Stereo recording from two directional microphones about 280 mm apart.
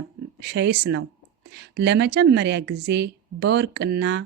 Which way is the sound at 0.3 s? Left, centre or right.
Right.